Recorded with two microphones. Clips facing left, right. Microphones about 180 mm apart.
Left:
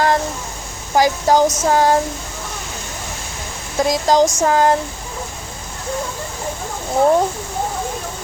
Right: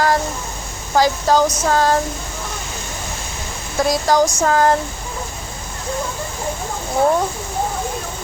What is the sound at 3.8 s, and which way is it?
Speech, 15° left (ahead or behind).